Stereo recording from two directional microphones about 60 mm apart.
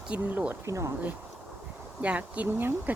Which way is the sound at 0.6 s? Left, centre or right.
Right.